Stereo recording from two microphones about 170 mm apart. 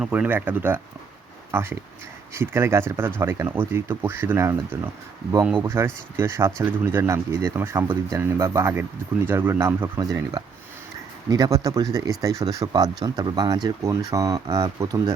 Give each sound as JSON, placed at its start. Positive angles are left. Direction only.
{"t": 0.0, "sound": "speech", "side_deg": -10}